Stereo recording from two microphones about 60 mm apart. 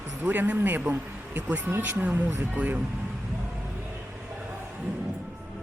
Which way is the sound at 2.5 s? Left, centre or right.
Right.